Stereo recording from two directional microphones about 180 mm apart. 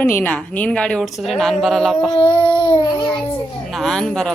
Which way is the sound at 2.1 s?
25° left (ahead or behind).